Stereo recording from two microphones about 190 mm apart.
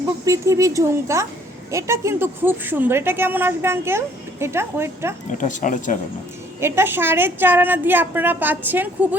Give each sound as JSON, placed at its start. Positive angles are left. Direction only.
{"t": 0.3, "sound": "speech", "side_deg": -15}
{"t": 5.3, "sound": "speech", "side_deg": 40}
{"t": 6.6, "sound": "speech", "side_deg": -15}